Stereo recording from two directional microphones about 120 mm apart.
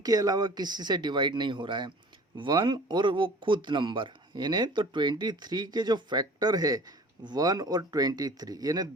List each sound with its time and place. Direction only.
0.0 s speech: 30° right (ahead or behind)